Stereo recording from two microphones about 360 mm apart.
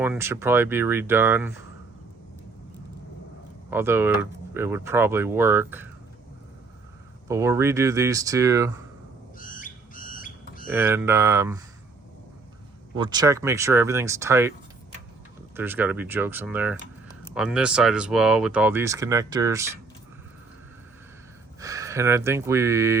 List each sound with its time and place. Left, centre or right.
0.0 s speech: centre
3.7 s speech: centre
7.3 s speech: centre
9.4 s a sound: left
10.7 s speech: centre
13.0 s speech: centre
15.5 s speech: centre
21.6 s speech: centre